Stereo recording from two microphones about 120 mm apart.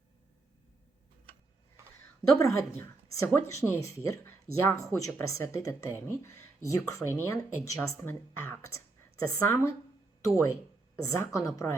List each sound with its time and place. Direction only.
2.4 s speech: 25° left (ahead or behind)